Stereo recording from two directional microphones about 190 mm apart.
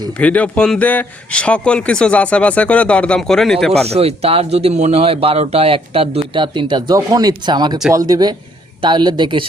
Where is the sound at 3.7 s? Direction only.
35° right (ahead or behind).